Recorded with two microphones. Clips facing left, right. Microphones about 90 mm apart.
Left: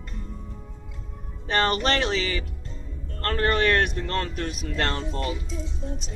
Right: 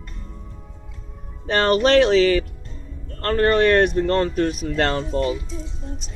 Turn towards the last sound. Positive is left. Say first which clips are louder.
# right 8 dB
turn(degrees=-15)  # may be behind; listen again after turning